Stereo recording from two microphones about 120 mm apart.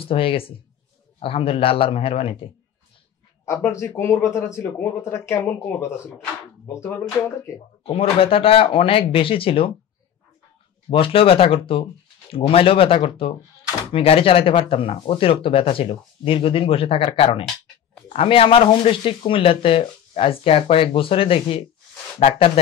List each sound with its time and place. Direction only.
0.0 s speech: 50° left (ahead or behind)
3.6 s speech: 20° left (ahead or behind)
7.5 s speech: 45° left (ahead or behind)
10.9 s speech: 50° left (ahead or behind)